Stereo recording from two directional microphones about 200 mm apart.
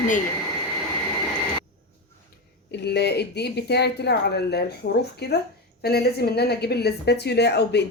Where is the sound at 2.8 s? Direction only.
55° left (ahead or behind).